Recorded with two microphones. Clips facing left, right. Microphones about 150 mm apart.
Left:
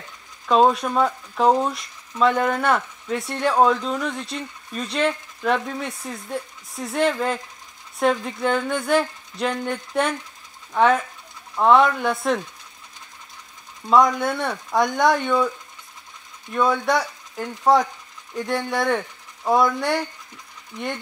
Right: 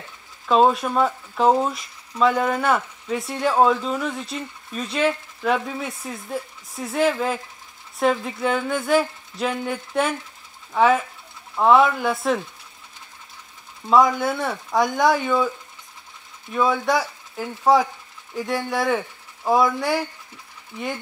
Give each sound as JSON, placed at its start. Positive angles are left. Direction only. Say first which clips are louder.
{"t": 0.5, "sound": "speech", "louder": "even", "side_deg": 0}
{"t": 13.8, "sound": "speech", "louder": "even", "side_deg": 0}
{"t": 16.5, "sound": "speech", "louder": "even", "side_deg": 0}